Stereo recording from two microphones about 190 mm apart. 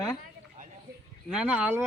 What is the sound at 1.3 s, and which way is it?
Speech, 5° right (ahead or behind).